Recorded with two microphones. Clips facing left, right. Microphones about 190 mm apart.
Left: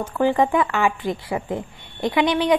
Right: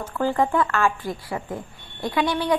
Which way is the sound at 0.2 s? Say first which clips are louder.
Left 3 dB; 15° left (ahead or behind).